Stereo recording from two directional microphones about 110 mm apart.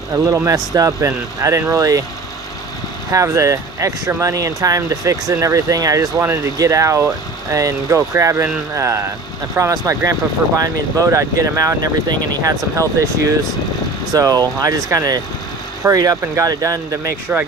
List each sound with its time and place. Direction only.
0.1 s speech: 25° right (ahead or behind)
3.1 s speech: 30° right (ahead or behind)
14.1 s speech: 35° right (ahead or behind)
17.3 s speech: 15° right (ahead or behind)